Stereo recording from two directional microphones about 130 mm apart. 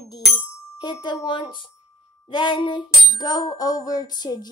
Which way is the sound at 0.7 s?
35° left (ahead or behind).